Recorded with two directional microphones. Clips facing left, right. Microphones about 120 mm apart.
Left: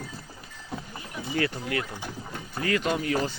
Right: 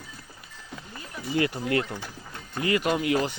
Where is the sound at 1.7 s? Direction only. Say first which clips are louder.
Right 4 dB; 30° right (ahead or behind).